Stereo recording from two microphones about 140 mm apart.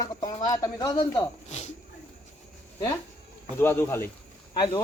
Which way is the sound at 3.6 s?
15° left (ahead or behind).